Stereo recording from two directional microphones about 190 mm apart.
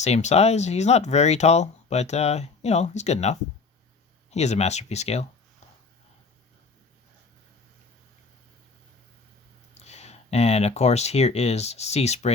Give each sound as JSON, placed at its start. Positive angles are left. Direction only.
{"t": 0.0, "sound": "speech", "side_deg": 35}
{"t": 9.8, "sound": "speech", "side_deg": 35}